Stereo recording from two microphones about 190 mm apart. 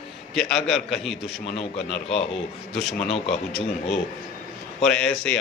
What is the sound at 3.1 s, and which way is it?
Speech, 30° left (ahead or behind).